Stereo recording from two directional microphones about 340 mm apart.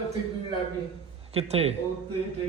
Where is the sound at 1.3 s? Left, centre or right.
Centre.